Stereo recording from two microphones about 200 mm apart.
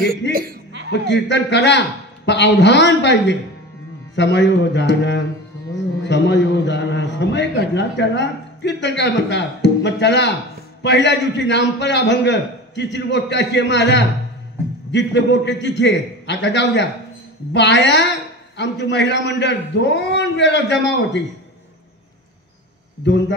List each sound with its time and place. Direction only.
0.3 s chuckle: 45° right (ahead or behind)
1.0 s a man's voice: 60° left (ahead or behind)
23.0 s a man's voice: 65° left (ahead or behind)